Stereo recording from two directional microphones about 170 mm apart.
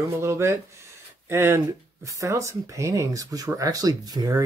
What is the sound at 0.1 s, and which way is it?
Speech, 15° right (ahead or behind).